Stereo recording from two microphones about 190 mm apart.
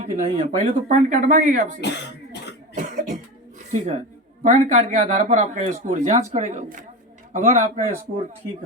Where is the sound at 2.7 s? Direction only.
40° right (ahead or behind).